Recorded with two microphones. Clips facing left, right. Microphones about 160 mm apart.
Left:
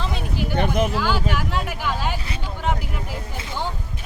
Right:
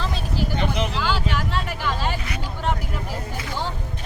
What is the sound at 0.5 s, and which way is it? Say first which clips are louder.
Speech: left 5 dB; 50° left (ahead or behind).